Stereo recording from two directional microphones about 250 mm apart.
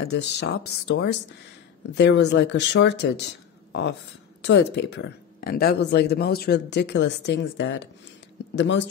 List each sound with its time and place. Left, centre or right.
0.0 s speech: left
4.4 s speech: left